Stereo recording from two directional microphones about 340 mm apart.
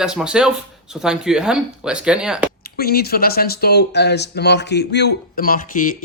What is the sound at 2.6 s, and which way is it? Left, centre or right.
Speech, left.